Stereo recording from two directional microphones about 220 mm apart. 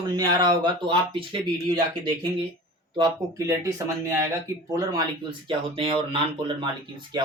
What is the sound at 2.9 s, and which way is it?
Speech, 20° right (ahead or behind).